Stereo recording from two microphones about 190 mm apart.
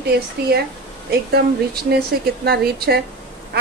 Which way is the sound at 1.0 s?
55° right (ahead or behind).